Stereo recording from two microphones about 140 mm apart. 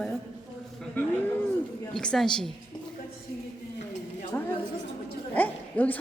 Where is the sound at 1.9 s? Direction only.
5° left (ahead or behind).